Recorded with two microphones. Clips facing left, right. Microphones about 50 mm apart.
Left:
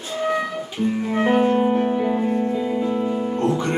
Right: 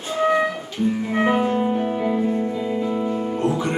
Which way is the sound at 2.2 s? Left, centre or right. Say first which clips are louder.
Left 1 dB; centre.